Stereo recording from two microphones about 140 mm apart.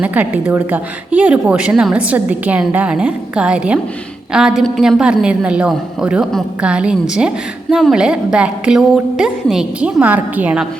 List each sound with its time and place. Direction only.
0.0 s a woman's voice: 10° right (ahead or behind)